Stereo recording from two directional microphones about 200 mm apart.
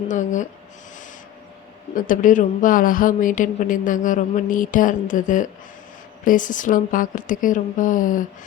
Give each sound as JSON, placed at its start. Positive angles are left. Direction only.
{"t": 0.1, "sound": "a woman's voice", "side_deg": 40}
{"t": 2.0, "sound": "a woman's voice", "side_deg": 40}